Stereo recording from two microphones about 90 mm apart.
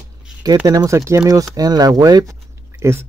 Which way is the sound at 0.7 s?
35° right (ahead or behind).